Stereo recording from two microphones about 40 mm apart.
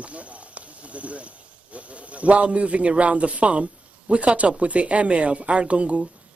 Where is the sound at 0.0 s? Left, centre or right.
Right.